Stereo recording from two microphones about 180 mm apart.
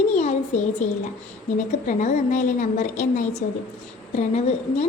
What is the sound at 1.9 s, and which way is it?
A woman's voice, 45° left (ahead or behind).